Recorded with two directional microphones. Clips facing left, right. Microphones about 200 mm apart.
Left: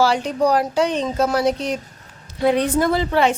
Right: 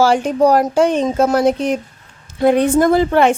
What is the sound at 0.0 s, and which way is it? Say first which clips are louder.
Speech: right 5 dB; 50° right (ahead or behind).